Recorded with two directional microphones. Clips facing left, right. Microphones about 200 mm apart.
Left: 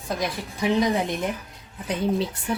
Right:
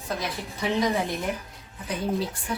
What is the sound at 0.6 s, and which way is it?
Speech, 15° left (ahead or behind).